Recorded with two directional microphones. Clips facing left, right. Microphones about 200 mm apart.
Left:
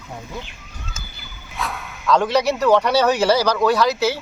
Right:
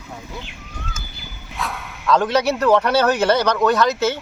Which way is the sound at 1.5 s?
Centre (ahead or behind).